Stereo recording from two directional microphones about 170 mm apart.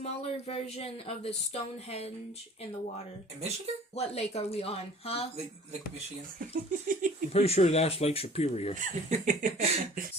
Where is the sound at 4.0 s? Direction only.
40° left (ahead or behind).